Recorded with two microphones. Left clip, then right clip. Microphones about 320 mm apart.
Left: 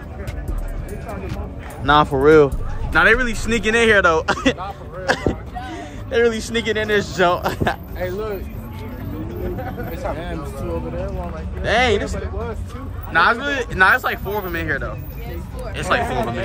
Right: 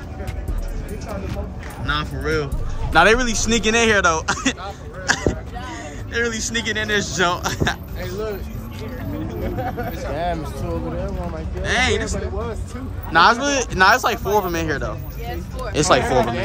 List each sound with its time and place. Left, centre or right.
1.9 s speech: centre
2.9 s speech: centre
8.0 s speech: left
10.1 s speech: right
11.6 s speech: centre
13.1 s speech: centre